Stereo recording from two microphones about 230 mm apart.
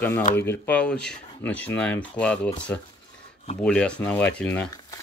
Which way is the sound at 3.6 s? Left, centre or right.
Centre.